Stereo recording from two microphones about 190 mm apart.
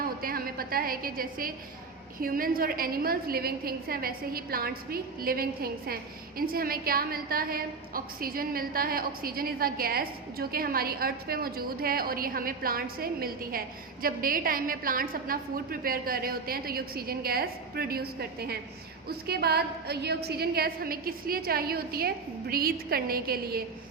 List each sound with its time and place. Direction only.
0.0 s a woman's voice: 50° right (ahead or behind)